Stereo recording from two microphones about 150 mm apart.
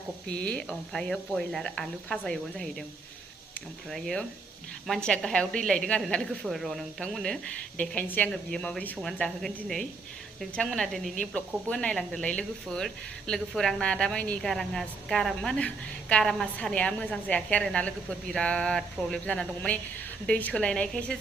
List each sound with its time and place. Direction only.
0.3 s a woman's voice: 5° left (ahead or behind)
3.8 s a woman's voice: centre (ahead or behind)